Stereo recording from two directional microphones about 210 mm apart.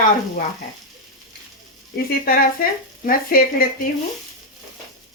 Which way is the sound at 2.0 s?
45° left (ahead or behind).